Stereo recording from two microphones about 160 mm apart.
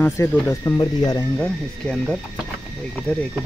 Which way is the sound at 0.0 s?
15° left (ahead or behind).